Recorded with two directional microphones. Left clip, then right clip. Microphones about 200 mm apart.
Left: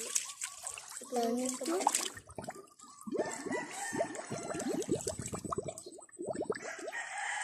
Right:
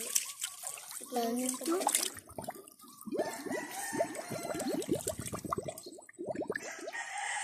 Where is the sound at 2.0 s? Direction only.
5° left (ahead or behind).